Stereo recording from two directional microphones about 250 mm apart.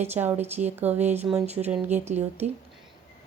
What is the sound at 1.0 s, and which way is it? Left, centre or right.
Speech, right.